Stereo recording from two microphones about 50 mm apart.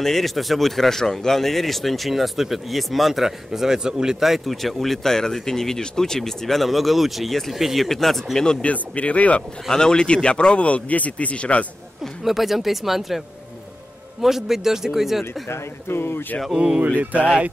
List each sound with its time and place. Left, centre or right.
0.0 s speech: centre
8.6 s a man's voice: left
9.7 s a man's voice: centre
12.2 s speech: centre
14.2 s speech: centre
15.4 s speech: left
17.0 s speech: right